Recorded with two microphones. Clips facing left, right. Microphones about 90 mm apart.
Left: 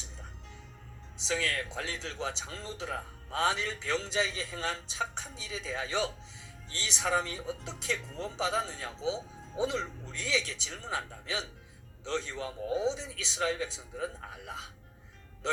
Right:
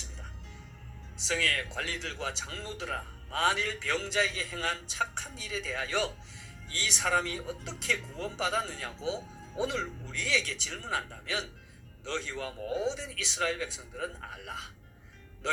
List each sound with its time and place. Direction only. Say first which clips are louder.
1.3 s speech: right 1 dB; 25° left (ahead or behind)